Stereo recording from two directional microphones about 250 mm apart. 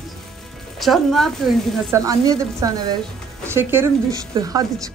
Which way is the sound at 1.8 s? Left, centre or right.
Centre.